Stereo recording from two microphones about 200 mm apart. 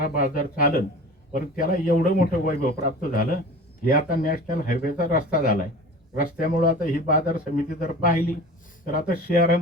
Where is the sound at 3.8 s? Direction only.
45° left (ahead or behind).